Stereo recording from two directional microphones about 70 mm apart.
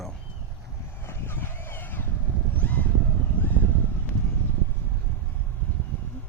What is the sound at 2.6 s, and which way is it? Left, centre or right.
Vehicle, left.